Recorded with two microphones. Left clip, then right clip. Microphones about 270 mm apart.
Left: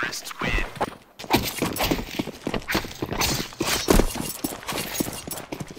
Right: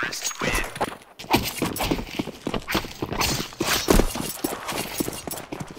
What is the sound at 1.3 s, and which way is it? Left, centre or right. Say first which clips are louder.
Clip-clop: even; centre.